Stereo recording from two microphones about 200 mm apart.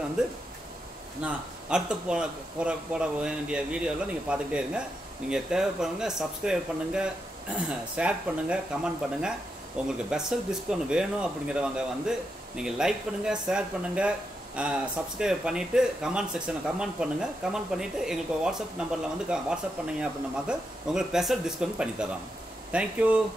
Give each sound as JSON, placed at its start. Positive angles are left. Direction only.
{"t": 0.2, "sound": "speech", "side_deg": -5}
{"t": 9.8, "sound": "speech", "side_deg": -5}